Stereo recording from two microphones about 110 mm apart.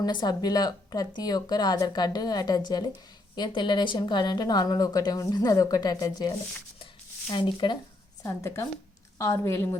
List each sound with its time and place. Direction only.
0.0 s speech: 40° left (ahead or behind)
7.3 s speech: 45° left (ahead or behind)
8.2 s a woman's voice: 25° left (ahead or behind)